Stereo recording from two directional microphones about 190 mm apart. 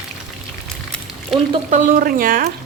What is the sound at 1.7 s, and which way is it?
Speech, 45° right (ahead or behind).